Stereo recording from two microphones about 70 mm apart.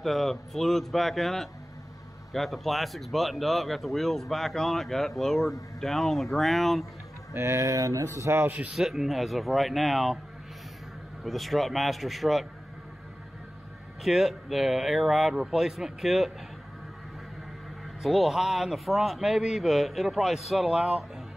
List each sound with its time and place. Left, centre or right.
0.0 s speech: centre
7.3 s speech: right
8.7 s speech: centre
11.2 s speech: centre
14.0 s speech: centre
18.0 s speech: centre